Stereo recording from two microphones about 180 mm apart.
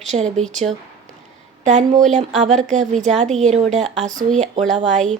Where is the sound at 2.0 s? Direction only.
40° right (ahead or behind).